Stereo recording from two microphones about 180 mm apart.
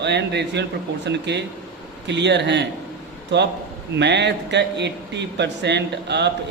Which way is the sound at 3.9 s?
75° right (ahead or behind).